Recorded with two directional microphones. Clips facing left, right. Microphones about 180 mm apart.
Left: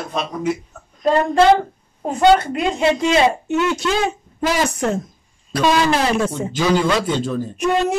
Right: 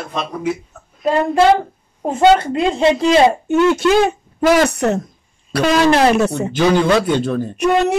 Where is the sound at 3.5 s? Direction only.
55° right (ahead or behind).